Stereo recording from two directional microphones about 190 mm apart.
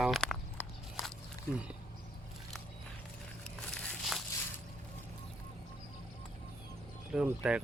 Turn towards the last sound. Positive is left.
turn(degrees=-5)  # may be behind; listen again after turning